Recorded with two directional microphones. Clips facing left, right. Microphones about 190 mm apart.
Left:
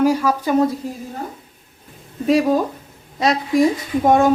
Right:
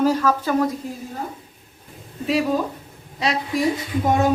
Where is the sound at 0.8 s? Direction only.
45° left (ahead or behind).